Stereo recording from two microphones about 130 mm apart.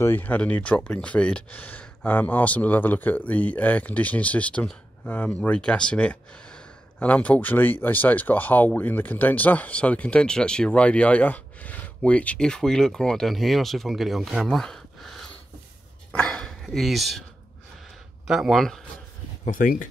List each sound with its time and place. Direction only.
0.0 s speech: 15° left (ahead or behind)
16.1 s dog: 5° left (ahead or behind)
18.2 s speech: 5° right (ahead or behind)
19.4 s speech: 85° left